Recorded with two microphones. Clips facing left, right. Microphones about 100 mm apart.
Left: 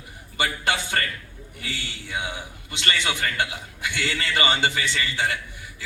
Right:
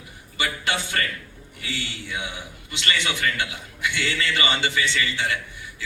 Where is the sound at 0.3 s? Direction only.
45° left (ahead or behind).